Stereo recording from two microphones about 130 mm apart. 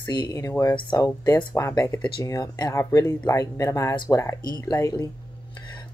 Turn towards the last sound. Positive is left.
turn(degrees=25)  # may be behind; listen again after turning